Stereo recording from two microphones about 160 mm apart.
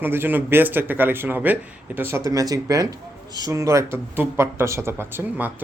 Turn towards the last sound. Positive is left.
turn(degrees=-10)  # may be behind; listen again after turning